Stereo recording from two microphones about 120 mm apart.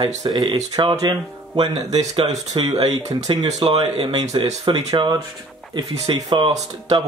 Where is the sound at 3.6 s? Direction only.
55° right (ahead or behind).